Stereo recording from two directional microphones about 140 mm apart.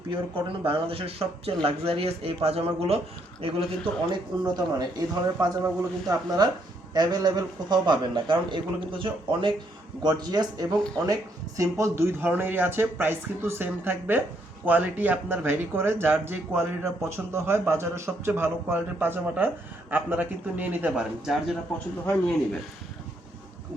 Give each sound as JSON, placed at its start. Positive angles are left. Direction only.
{"t": 0.1, "sound": "speech", "side_deg": -40}
{"t": 4.1, "sound": "speech", "side_deg": -30}
{"t": 10.7, "sound": "speech", "side_deg": 0}
{"t": 10.9, "sound": "speech", "side_deg": -25}